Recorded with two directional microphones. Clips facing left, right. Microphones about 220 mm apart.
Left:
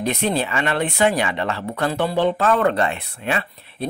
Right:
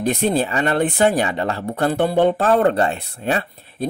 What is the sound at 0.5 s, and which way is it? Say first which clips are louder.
Speech: right 3 dB; 40° right (ahead or behind).